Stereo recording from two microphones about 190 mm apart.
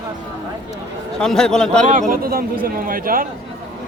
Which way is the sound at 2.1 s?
50° right (ahead or behind).